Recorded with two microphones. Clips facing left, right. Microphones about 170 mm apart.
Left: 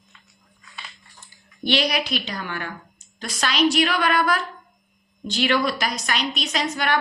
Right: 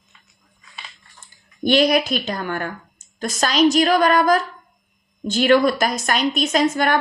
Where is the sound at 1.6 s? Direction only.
45° right (ahead or behind).